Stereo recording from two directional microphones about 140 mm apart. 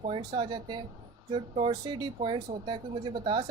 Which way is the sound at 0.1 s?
30° right (ahead or behind).